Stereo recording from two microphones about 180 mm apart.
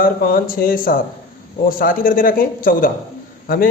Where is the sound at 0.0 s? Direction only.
55° left (ahead or behind).